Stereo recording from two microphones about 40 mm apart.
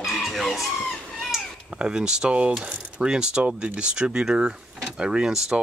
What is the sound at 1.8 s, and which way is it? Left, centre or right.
Speech, right.